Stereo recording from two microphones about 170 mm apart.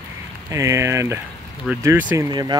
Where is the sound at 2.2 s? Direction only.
25° right (ahead or behind).